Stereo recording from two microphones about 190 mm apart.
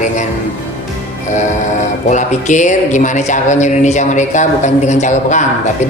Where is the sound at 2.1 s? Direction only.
40° left (ahead or behind).